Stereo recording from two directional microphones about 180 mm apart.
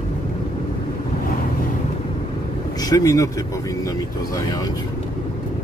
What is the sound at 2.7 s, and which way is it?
Speech, 20° left (ahead or behind).